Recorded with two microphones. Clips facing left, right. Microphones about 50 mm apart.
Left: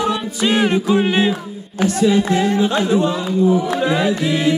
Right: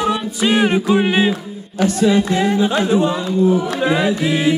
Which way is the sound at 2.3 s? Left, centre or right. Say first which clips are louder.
Even; centre.